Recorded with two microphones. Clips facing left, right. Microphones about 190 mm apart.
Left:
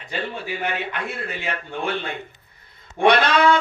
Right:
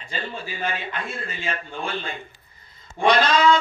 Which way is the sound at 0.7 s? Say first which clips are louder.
Even; 65° left (ahead or behind).